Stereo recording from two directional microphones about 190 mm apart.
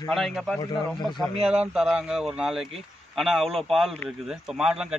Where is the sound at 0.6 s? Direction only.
25° left (ahead or behind).